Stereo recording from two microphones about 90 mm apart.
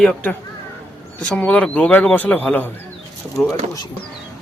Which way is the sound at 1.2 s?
10° left (ahead or behind).